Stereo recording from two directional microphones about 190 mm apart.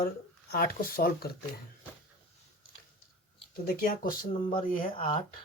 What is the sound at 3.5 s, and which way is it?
Speech, 50° left (ahead or behind).